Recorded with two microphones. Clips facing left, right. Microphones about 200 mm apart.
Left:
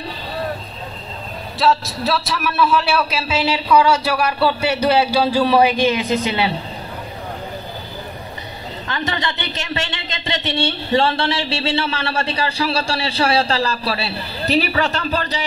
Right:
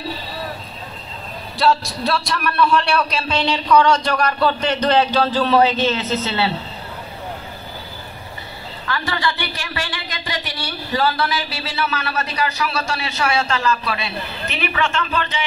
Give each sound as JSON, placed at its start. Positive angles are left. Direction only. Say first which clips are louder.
{"t": 1.6, "sound": "a man's voice", "louder": "even", "side_deg": 0}
{"t": 8.8, "sound": "a woman's voice", "louder": "right 1 dB", "side_deg": 20}